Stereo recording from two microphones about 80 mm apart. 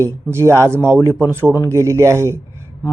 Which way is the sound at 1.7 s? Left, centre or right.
Right.